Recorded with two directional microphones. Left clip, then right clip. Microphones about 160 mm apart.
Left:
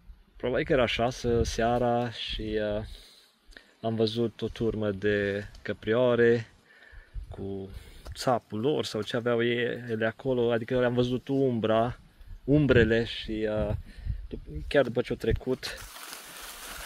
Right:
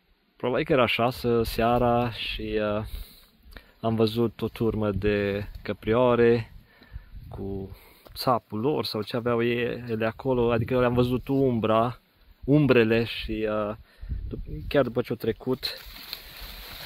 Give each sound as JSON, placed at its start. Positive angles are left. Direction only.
{"t": 0.4, "sound": "speech", "side_deg": -25}
{"t": 7.2, "sound": "a sound", "side_deg": -30}
{"t": 8.1, "sound": "speech", "side_deg": -20}